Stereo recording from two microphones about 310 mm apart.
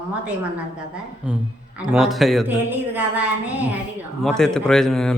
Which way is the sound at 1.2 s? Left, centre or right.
Centre.